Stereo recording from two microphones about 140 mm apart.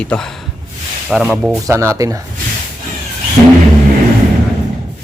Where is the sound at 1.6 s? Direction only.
20° right (ahead or behind).